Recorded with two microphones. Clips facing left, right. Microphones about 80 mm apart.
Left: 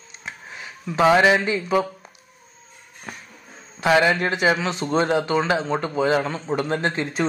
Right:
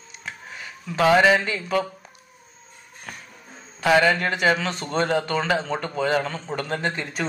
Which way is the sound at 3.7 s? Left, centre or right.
Centre.